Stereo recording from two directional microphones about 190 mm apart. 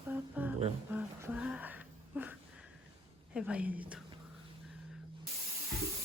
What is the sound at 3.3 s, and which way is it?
Speech, 5° right (ahead or behind).